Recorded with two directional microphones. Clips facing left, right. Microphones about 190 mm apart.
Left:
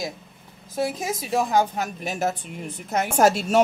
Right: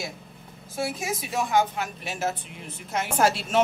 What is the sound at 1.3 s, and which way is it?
Speech, 40° left (ahead or behind).